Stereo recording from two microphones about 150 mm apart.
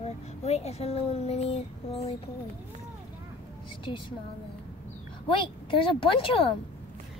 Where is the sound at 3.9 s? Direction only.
35° left (ahead or behind).